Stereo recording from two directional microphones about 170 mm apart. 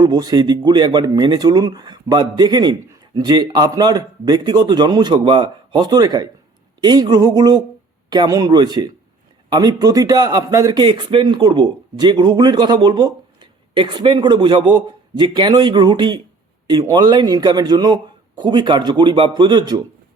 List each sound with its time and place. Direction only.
0.0 s a man's voice: 25° right (ahead or behind)